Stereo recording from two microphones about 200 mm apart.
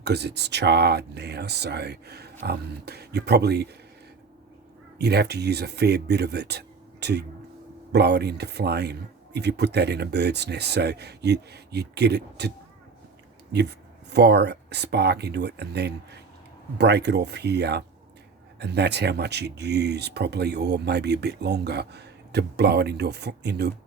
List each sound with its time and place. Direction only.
0.0 s speech: 55° right (ahead or behind)
4.9 s speech: 55° right (ahead or behind)
13.5 s speech: 55° right (ahead or behind)